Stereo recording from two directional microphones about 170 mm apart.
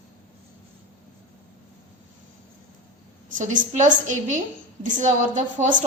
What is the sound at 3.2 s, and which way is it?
A woman's voice, 50° right (ahead or behind).